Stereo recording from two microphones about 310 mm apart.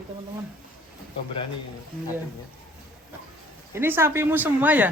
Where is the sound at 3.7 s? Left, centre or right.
Centre.